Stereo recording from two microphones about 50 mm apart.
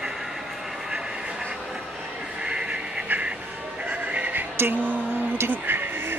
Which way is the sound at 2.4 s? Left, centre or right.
Right.